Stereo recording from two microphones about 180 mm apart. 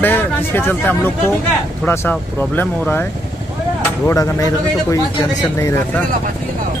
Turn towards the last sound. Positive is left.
turn(degrees=15)  # may be behind; listen again after turning